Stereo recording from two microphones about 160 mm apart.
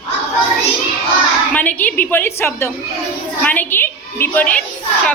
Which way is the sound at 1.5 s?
10° left (ahead or behind).